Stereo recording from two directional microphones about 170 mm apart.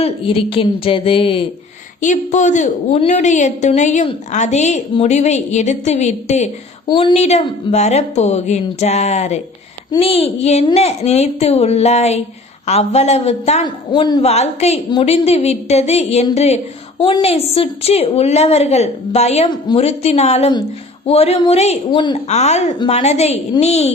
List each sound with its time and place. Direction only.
0.0 s a woman's voice: 35° left (ahead or behind)
2.0 s a woman's voice: 45° left (ahead or behind)
6.8 s a woman's voice: 30° left (ahead or behind)
13.9 s a woman's voice: 25° left (ahead or behind)
14.2 s a woman's voice: 40° left (ahead or behind)